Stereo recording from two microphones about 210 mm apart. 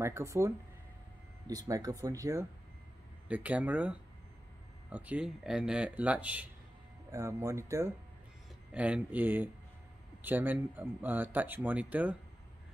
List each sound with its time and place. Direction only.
0.0 s speech: 15° right (ahead or behind)
1.5 s speech: 15° right (ahead or behind)